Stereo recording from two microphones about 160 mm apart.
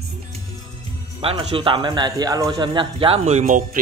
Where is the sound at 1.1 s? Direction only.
35° right (ahead or behind).